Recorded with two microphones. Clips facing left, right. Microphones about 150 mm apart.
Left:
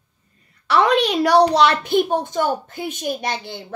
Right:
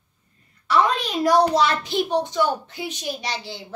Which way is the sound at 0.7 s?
70° left (ahead or behind).